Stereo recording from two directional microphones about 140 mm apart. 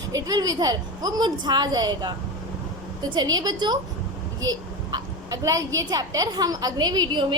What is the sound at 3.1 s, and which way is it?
Speech, 30° right (ahead or behind).